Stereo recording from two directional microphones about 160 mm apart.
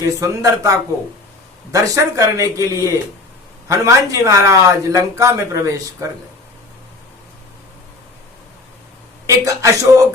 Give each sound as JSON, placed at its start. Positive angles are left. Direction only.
{"t": 0.0, "sound": "speech", "side_deg": -20}
{"t": 9.2, "sound": "speech", "side_deg": -20}